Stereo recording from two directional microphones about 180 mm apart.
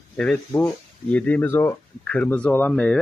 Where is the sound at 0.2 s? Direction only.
5° left (ahead or behind).